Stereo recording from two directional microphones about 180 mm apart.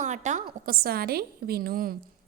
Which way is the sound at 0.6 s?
55° right (ahead or behind).